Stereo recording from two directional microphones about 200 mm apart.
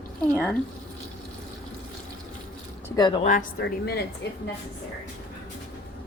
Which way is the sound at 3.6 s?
55° left (ahead or behind).